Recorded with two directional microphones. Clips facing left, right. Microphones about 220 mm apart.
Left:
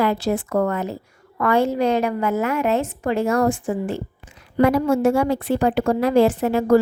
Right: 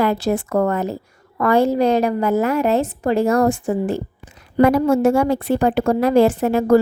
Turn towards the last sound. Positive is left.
turn(degrees=-45)  # may be behind; listen again after turning